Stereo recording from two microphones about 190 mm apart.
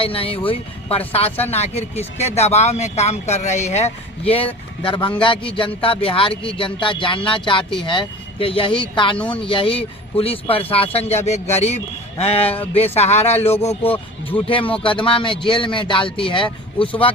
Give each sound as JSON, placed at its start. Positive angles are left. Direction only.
{"t": 0.0, "sound": "speech", "side_deg": 30}
{"t": 9.1, "sound": "speech", "side_deg": 5}
{"t": 9.4, "sound": "speech", "side_deg": 25}
{"t": 13.4, "sound": "speech", "side_deg": 10}
{"t": 14.4, "sound": "speech", "side_deg": 30}